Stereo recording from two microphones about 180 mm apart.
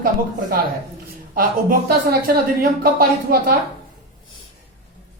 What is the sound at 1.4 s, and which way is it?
A woman's voice, 55° right (ahead or behind).